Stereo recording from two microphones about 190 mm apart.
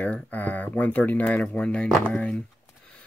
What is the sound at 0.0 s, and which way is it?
Speech, 10° left (ahead or behind).